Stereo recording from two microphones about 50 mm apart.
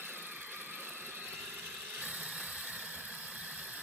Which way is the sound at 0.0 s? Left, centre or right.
Right.